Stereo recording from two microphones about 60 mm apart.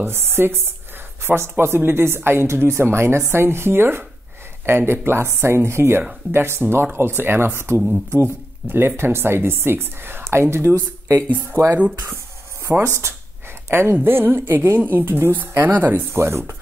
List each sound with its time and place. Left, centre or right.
0.0 s speech: right
16.1 s speech: right